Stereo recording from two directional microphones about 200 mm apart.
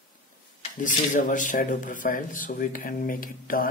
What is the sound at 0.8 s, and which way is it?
Speech, 40° left (ahead or behind).